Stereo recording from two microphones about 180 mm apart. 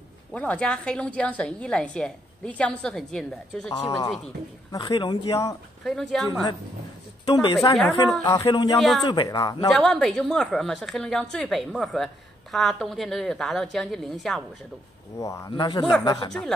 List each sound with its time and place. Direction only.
0.3 s a woman's voice: 10° left (ahead or behind)
3.7 s speech: 20° left (ahead or behind)
5.9 s a woman's voice: centre (ahead or behind)
7.7 s a woman's voice: centre (ahead or behind)
8.3 s speech: 25° left (ahead or behind)
9.7 s a woman's voice: centre (ahead or behind)
15.1 s speech: 15° left (ahead or behind)
16.3 s a woman's voice: 5° left (ahead or behind)